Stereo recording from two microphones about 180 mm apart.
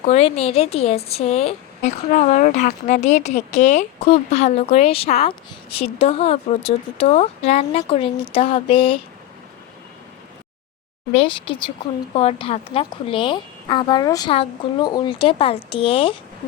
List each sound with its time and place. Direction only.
0.0 s a woman's voice: 35° left (ahead or behind)
11.1 s speech: 30° left (ahead or behind)